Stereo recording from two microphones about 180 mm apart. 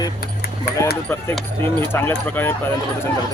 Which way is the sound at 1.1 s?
10° left (ahead or behind).